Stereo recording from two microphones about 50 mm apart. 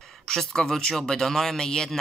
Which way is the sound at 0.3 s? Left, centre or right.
Centre.